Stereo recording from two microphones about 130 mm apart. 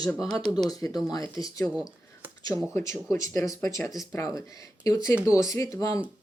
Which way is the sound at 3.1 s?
25° left (ahead or behind).